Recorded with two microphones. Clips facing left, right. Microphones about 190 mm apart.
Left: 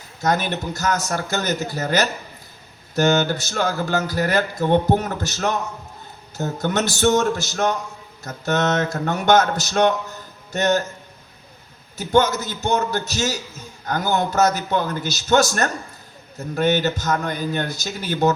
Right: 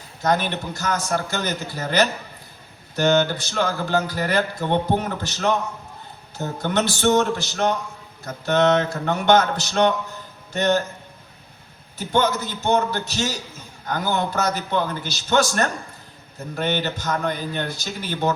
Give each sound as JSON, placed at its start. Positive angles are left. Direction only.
{"t": 0.2, "sound": "speech", "side_deg": 45}
{"t": 11.9, "sound": "speech", "side_deg": 45}